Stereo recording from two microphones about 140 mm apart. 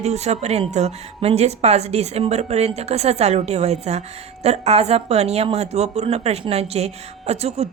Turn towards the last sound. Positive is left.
turn(degrees=-50)  # may be behind; listen again after turning